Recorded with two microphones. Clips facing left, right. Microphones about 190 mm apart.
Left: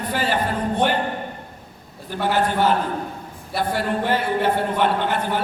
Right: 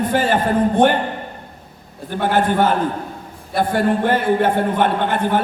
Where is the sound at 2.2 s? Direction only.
50° right (ahead or behind).